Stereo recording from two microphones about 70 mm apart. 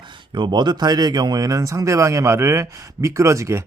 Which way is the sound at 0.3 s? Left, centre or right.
Right.